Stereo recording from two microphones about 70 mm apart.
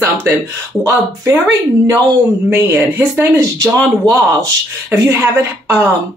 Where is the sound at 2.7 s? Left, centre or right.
Right.